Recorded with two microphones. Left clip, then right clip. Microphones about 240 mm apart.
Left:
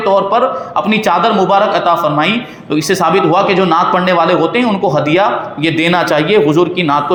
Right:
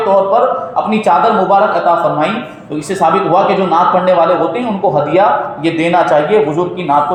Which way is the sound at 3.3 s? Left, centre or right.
Left.